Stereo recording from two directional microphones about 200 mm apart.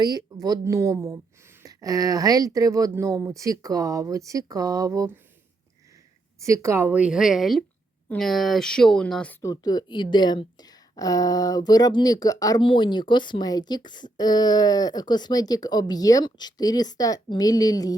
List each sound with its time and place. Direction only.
0.0 s speech: 20° right (ahead or behind)
6.4 s speech: 15° right (ahead or behind); by 17.9 s 20° left (ahead or behind)